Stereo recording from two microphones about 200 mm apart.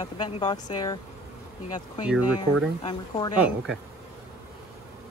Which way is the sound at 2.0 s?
5° right (ahead or behind).